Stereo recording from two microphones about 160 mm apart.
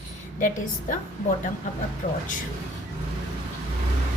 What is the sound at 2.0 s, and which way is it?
Speech, 50° left (ahead or behind).